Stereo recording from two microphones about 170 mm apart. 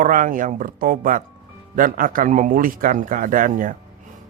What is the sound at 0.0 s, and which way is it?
Speech, 50° right (ahead or behind).